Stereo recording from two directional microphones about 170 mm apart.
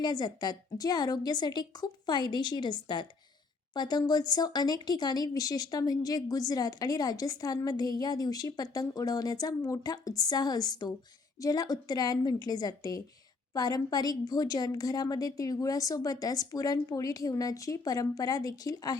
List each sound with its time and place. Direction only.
0.0 s speech: 25° left (ahead or behind)